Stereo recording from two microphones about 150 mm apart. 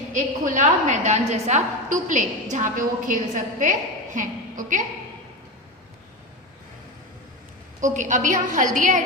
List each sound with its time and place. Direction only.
0.1 s a woman's voice: 55° right (ahead or behind)
7.9 s a woman's voice: 55° right (ahead or behind)